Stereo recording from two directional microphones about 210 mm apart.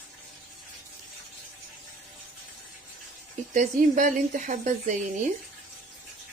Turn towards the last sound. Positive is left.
turn(degrees=-35)  # may be behind; listen again after turning